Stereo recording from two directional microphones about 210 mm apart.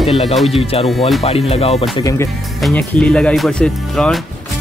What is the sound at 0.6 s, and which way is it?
Speech, 25° left (ahead or behind).